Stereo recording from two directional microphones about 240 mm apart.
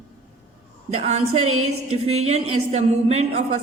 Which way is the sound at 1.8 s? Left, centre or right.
Right.